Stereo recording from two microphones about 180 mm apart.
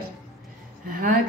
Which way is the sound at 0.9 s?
50° right (ahead or behind).